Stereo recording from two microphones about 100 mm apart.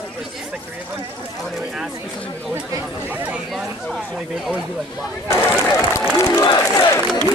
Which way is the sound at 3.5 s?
Centre (ahead or behind).